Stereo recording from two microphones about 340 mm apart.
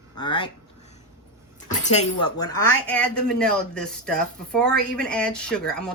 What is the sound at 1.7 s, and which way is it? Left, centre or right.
Speech, centre.